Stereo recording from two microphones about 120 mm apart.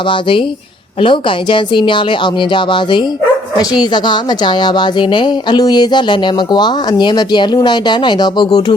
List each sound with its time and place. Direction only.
0.1 s a woman's voice: 45° left (ahead or behind)